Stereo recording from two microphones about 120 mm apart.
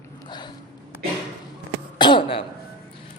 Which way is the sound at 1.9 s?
40° left (ahead or behind).